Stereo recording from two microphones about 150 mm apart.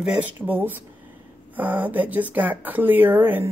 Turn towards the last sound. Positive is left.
turn(degrees=-15)  # may be behind; listen again after turning